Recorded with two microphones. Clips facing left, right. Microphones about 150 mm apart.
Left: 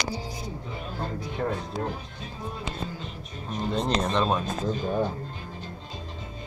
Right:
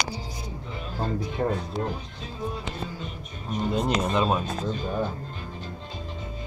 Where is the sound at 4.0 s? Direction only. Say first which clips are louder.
Right 1 dB; 5° right (ahead or behind).